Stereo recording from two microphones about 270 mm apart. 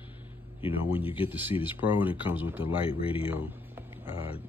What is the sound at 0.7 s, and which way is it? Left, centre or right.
Speech, centre.